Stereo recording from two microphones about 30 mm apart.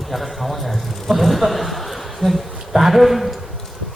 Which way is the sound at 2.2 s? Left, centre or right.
Left.